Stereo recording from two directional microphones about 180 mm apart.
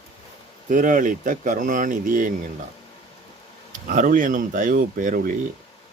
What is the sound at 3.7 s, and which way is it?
Speech, 50° right (ahead or behind).